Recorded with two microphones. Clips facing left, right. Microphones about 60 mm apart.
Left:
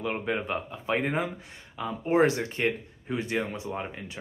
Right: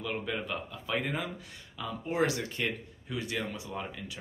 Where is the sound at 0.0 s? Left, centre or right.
Left.